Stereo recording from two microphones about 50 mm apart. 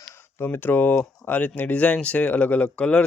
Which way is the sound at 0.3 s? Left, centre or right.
Left.